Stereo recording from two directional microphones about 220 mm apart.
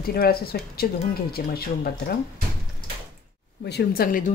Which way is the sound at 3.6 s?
45° left (ahead or behind).